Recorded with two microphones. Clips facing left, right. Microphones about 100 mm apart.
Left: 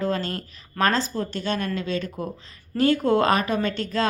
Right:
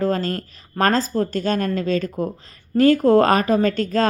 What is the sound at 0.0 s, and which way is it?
A woman's voice, 40° right (ahead or behind).